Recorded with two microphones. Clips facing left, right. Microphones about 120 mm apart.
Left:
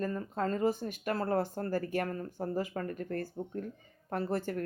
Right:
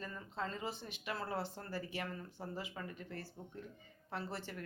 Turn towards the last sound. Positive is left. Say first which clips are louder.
# left 11 dB
turn(degrees=45)  # may be behind; listen again after turning